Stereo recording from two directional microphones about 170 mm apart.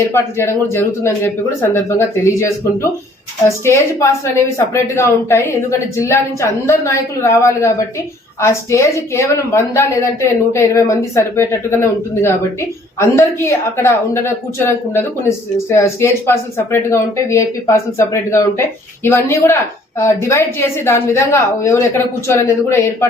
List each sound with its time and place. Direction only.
0.1 s a woman's voice: 15° left (ahead or behind)